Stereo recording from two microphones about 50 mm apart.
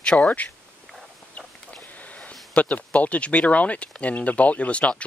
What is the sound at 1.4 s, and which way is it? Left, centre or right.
Chicken, left.